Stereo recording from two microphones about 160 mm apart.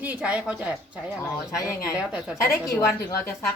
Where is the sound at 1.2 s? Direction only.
20° left (ahead or behind).